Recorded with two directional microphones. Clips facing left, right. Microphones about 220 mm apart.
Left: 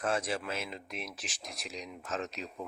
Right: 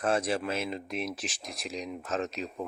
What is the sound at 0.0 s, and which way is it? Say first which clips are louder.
Speech: right 5 dB; 35° right (ahead or behind).